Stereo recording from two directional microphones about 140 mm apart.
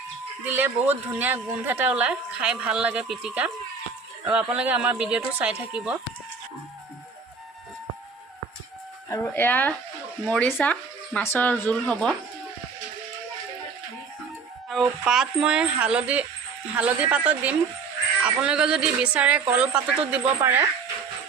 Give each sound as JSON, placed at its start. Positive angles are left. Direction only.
{"t": 0.4, "sound": "a woman's voice", "side_deg": -15}
{"t": 9.0, "sound": "speech", "side_deg": 20}
{"t": 14.7, "sound": "a woman's voice", "side_deg": 0}